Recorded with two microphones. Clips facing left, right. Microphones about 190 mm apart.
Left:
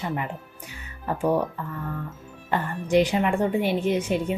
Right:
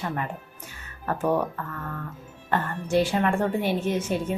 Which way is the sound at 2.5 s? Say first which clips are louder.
Left 2 dB; 15° left (ahead or behind).